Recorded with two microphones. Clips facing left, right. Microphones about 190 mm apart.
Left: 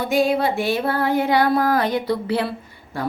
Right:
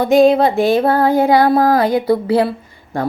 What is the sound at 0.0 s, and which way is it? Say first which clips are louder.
Speech: right 8 dB; 45° right (ahead or behind).